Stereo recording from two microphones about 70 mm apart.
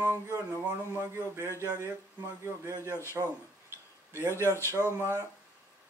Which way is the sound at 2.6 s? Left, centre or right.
Right.